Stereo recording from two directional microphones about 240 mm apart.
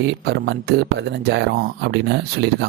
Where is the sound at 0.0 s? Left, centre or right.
Right.